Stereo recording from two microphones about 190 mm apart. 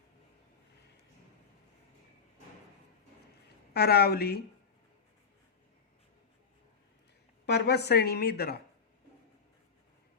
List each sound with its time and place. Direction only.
3.7 s a woman's voice: 55° left (ahead or behind)
7.4 s a woman's voice: 60° left (ahead or behind)